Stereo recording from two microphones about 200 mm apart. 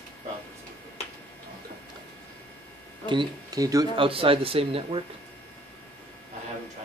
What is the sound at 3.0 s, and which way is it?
Speech, 25° right (ahead or behind).